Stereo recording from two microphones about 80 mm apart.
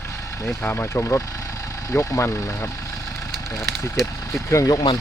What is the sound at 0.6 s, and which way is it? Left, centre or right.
Speech, left.